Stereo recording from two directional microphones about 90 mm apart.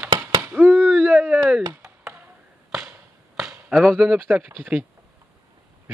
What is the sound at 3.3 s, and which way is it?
Chop, 5° right (ahead or behind).